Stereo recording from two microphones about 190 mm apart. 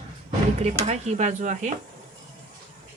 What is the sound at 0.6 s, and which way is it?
Speech, 35° right (ahead or behind).